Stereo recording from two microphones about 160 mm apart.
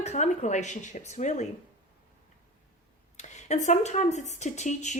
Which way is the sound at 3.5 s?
45° left (ahead or behind).